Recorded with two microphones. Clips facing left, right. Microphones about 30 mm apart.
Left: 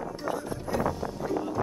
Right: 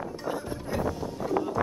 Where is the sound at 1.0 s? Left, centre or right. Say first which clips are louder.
Left 1 dB; left.